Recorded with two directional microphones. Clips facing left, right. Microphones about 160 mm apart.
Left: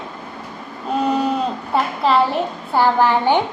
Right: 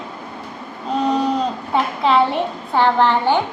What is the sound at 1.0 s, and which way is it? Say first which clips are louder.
A child's voice: right 1 dB; 5° left (ahead or behind).